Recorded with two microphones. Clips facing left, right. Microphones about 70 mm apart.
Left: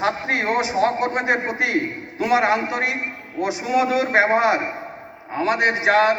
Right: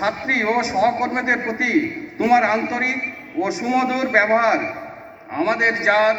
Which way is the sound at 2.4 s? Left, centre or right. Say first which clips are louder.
Even; centre.